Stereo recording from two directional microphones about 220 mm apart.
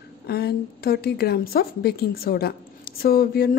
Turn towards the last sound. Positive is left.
turn(degrees=45)  # may be behind; listen again after turning